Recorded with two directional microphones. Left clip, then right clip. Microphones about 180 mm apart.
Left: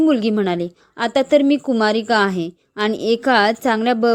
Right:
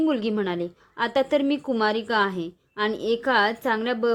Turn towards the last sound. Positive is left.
turn(degrees=30)  # may be behind; listen again after turning